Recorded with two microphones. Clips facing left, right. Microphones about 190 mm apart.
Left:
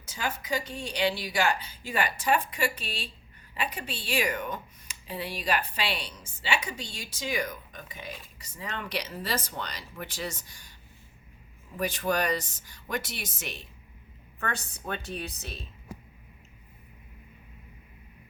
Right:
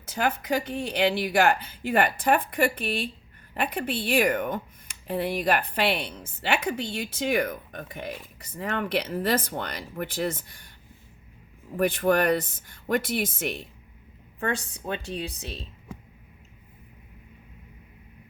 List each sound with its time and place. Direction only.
0.0 s speech: 60° right (ahead or behind)
11.8 s speech: 55° right (ahead or behind)
14.3 s a woman's voice: 25° right (ahead or behind)